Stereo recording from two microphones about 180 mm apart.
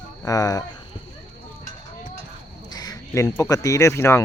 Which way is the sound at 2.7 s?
20° left (ahead or behind).